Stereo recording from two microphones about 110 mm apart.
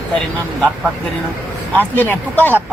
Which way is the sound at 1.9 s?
15° left (ahead or behind).